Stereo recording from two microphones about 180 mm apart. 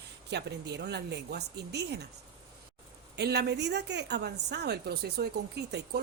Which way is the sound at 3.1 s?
65° right (ahead or behind).